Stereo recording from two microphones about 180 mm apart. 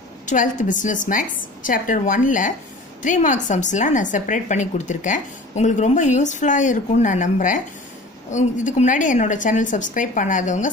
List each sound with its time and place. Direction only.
0.3 s a woman's voice: 45° left (ahead or behind)